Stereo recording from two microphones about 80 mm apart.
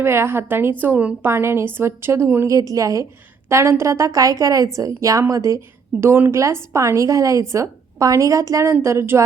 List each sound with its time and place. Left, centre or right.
0.0 s a woman's voice: right
1.3 s a woman's voice: right
2.5 s a woman's voice: right
5.5 s a woman's voice: right